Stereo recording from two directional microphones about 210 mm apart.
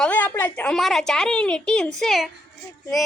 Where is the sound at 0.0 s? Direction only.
10° left (ahead or behind).